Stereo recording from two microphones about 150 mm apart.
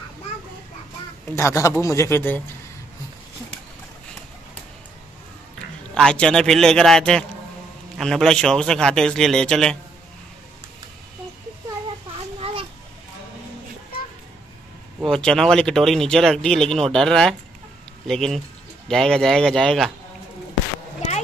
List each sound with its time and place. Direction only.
1.3 s a man's voice: 20° left (ahead or behind)
5.9 s speech: 5° left (ahead or behind)
15.0 s speech: 5° left (ahead or behind)